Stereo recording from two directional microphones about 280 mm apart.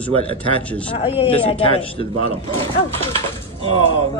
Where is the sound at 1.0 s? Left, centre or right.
Centre.